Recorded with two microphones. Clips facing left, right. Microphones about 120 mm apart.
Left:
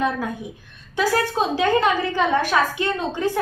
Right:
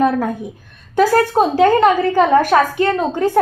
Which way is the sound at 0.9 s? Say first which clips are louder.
Right 8 dB; 45° right (ahead or behind).